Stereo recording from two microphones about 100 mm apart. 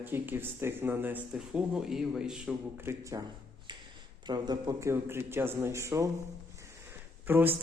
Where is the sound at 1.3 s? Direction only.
10° right (ahead or behind).